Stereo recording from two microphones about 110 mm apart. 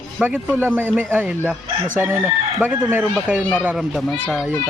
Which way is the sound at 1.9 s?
20° right (ahead or behind).